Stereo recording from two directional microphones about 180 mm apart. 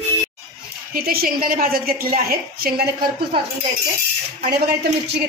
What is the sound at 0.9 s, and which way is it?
A woman's voice, 55° right (ahead or behind).